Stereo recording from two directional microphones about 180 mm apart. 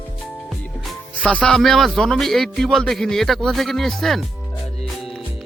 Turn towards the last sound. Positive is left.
turn(degrees=0)  # may be behind; listen again after turning